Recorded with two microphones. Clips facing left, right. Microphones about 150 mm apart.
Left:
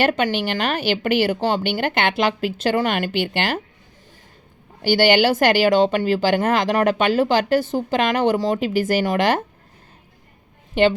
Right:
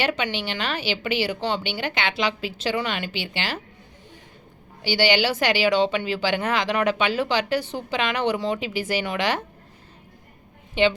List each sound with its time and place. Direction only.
0.0 s speech: 50° left (ahead or behind)
4.8 s speech: 50° left (ahead or behind)
10.8 s speech: 45° left (ahead or behind)